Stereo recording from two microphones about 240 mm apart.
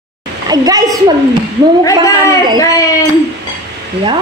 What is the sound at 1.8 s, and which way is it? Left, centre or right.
Speech, centre.